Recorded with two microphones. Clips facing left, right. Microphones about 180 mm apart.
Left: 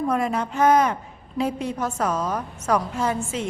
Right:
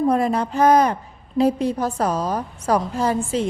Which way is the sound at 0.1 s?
35° right (ahead or behind).